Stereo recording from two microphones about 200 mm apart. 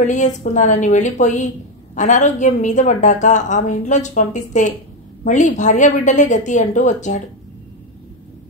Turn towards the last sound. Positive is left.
turn(degrees=35)  # may be behind; listen again after turning